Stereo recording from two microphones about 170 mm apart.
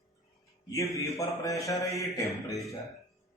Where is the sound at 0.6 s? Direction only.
20° left (ahead or behind).